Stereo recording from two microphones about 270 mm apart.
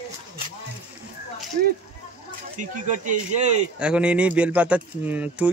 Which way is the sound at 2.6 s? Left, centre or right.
Right.